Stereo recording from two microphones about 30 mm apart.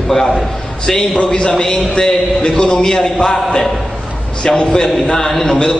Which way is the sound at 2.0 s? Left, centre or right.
Centre.